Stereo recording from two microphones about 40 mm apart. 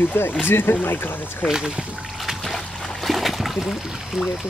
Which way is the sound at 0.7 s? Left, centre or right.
Left.